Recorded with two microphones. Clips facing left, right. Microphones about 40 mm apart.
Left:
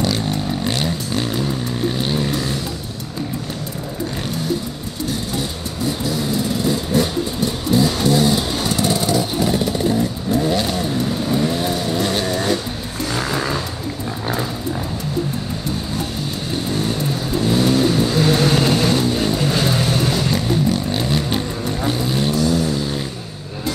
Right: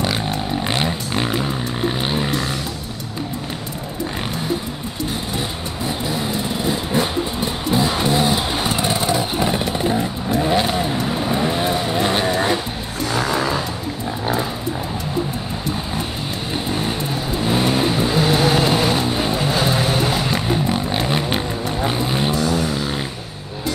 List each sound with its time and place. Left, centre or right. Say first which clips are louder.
0.0 s a sound: left 1 dB; right
5.9 s vehicle: left 2 dB; right
13.1 s music: right 2 dB; centre
16.6 s vehicle: left 2 dB; right